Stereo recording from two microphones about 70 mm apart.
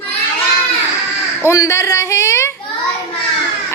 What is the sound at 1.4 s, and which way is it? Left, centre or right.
A man's voice, left.